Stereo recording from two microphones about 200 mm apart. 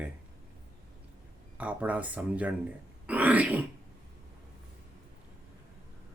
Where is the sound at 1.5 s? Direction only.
5° right (ahead or behind).